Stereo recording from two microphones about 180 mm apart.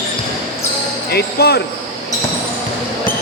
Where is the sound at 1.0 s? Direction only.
65° left (ahead or behind).